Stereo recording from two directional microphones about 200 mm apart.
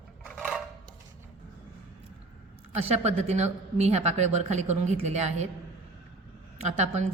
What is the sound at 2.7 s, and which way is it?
A woman's voice, 30° right (ahead or behind).